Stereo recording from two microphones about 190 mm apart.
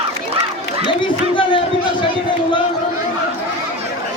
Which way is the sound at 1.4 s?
25° left (ahead or behind).